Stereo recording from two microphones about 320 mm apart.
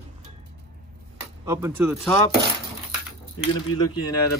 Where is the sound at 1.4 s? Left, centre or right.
Centre.